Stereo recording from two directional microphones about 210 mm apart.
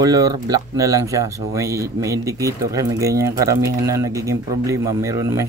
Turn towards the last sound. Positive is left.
turn(degrees=-15)  # may be behind; listen again after turning